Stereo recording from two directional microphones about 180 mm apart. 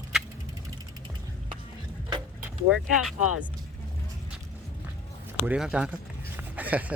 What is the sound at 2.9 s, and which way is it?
Speech, centre (ahead or behind).